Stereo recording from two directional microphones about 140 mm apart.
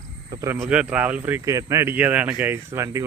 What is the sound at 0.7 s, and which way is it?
Speech, 10° right (ahead or behind).